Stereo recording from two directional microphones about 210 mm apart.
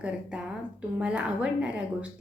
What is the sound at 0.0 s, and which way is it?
A woman's voice, 5° right (ahead or behind).